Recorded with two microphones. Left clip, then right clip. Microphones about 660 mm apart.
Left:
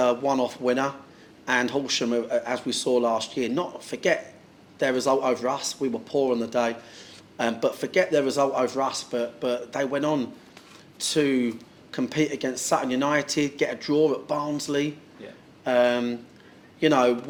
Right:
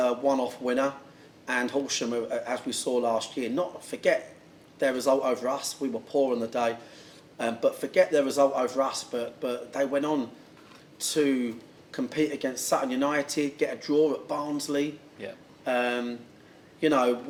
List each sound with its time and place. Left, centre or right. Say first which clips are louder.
0.0 s speech: left 3 dB; left